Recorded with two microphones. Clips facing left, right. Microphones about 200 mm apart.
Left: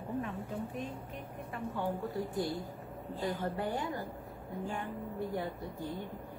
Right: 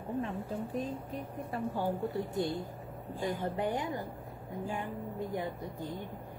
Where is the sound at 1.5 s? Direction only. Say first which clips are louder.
Right 5 dB; 35° right (ahead or behind).